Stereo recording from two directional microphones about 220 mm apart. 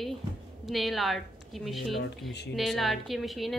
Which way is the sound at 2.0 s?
50° left (ahead or behind).